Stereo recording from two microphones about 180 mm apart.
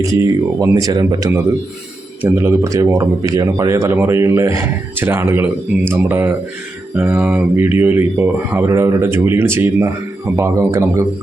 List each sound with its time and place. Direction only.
0.0 s a man's voice: 20° right (ahead or behind)